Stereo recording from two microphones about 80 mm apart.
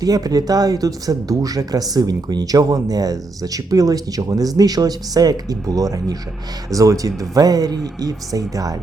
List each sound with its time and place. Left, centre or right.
0.0 s speech: right